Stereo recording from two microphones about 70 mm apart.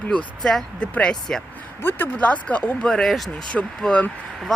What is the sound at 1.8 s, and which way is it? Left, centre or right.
Speech, left.